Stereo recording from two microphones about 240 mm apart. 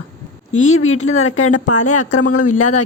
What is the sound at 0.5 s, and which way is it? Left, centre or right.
Speech, left.